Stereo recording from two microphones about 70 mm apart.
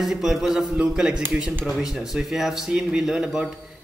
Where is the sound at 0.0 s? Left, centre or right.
Centre.